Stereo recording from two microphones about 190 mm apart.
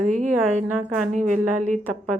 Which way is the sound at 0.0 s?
40° right (ahead or behind).